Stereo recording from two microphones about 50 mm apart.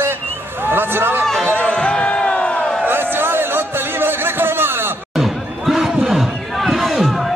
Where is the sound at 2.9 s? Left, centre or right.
Right.